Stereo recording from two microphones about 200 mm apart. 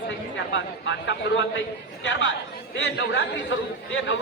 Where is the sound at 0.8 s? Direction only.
65° left (ahead or behind).